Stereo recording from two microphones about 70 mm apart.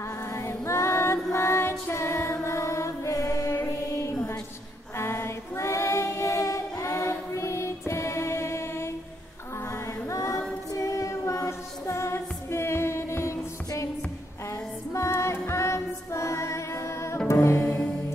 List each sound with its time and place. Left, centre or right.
0.3 s female singing: left
3.5 s music: left
4.9 s female singing: left
10.7 s music: left
14.9 s music: left